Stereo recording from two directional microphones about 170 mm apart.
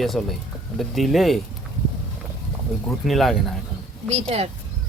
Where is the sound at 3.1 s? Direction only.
Centre (ahead or behind).